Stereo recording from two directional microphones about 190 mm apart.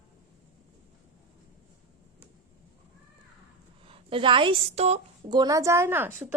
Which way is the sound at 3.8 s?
30° right (ahead or behind).